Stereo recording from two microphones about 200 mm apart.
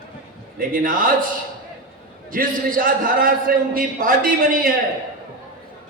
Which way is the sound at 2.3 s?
45° right (ahead or behind).